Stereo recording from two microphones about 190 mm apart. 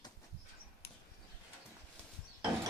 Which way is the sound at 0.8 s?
55° left (ahead or behind).